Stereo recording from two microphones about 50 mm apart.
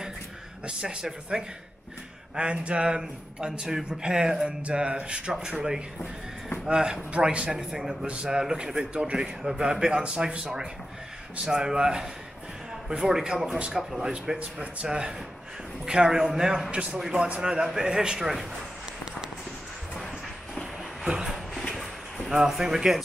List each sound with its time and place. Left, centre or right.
0.7 s a man's voice: centre
4.5 s a man's voice: right
9.2 s a man's voice: centre
14.4 s speech: right
14.9 s a man's voice: centre
21.0 s a sound: centre
21.5 s a sound: centre
22.3 s a man's voice: centre